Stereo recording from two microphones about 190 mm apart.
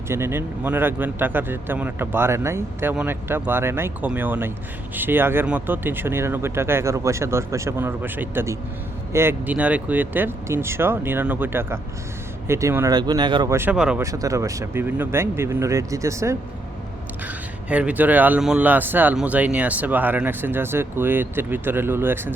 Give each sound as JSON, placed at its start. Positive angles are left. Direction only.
{"t": 0.1, "sound": "speech", "side_deg": -10}
{"t": 13.6, "sound": "speech", "side_deg": -5}
{"t": 14.0, "sound": "speech", "side_deg": -15}